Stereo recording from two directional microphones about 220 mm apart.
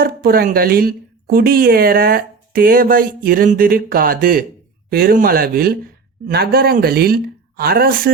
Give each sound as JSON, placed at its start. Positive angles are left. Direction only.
{"t": 0.0, "sound": "speech", "side_deg": -40}